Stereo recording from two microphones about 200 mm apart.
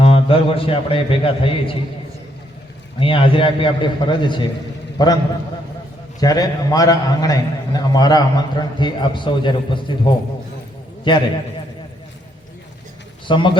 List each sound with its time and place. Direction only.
0.0 s a man's voice: 25° left (ahead or behind)
3.0 s a man's voice: 25° left (ahead or behind)
6.1 s a man's voice: 20° left (ahead or behind)
11.1 s a man's voice: 25° left (ahead or behind)
13.2 s a man's voice: 25° left (ahead or behind)